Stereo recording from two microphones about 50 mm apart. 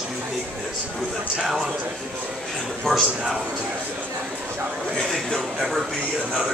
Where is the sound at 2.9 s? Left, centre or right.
Centre.